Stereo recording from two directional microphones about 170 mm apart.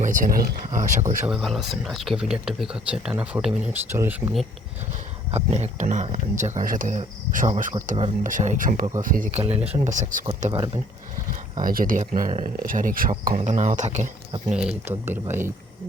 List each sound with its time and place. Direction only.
0.0 s speech: 50° right (ahead or behind)
1.3 s speech: centre (ahead or behind)
5.3 s speech: 40° right (ahead or behind)
8.2 s speech: 50° right (ahead or behind)
11.6 s speech: 55° right (ahead or behind)
14.5 s speech: 5° right (ahead or behind)